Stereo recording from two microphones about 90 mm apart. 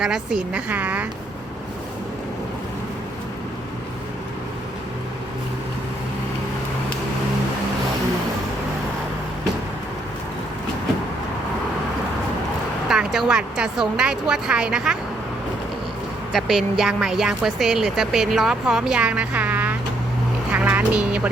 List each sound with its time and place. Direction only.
0.0 s speech: 5° right (ahead or behind)
0.7 s speech: 15° right (ahead or behind)
12.9 s speech: 5° right (ahead or behind)
16.3 s speech: centre (ahead or behind); by 19.7 s 20° right (ahead or behind)
20.5 s music: 20° right (ahead or behind)